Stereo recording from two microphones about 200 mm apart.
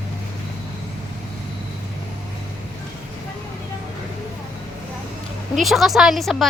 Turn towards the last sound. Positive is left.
turn(degrees=0)  # may be behind; listen again after turning